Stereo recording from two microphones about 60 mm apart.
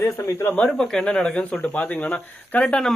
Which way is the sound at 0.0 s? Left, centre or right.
Left.